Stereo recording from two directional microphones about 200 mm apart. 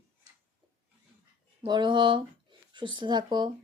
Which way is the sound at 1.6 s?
20° right (ahead or behind).